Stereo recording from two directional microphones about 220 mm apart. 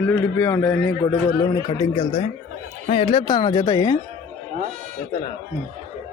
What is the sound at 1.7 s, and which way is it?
Speech, 20° left (ahead or behind).